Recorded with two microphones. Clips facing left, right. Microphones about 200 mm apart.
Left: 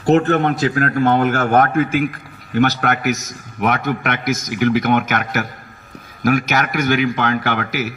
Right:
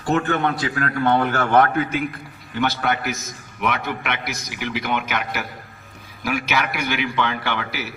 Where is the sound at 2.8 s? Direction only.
70° left (ahead or behind).